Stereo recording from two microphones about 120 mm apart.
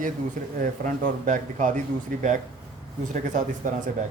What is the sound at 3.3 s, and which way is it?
Speech, 90° right.